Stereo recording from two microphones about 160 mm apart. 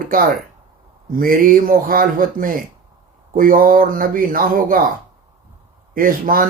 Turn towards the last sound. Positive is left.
turn(degrees=-60)  # may be behind; listen again after turning